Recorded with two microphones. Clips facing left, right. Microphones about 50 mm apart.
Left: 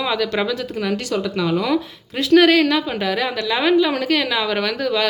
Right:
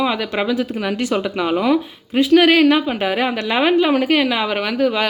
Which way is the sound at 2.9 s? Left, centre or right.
Right.